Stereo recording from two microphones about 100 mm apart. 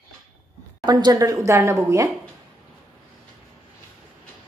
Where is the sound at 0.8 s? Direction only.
45° right (ahead or behind); by 2.1 s 25° right (ahead or behind).